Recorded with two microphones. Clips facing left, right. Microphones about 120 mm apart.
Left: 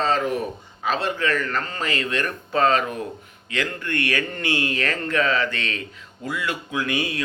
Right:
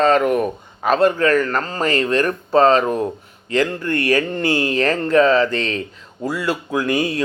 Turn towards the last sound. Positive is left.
turn(degrees=-40)  # may be behind; listen again after turning